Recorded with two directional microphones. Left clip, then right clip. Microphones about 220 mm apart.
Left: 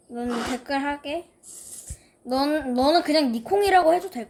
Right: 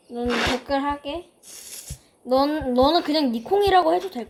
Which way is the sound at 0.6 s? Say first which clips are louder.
Right 2 dB; centre (ahead or behind).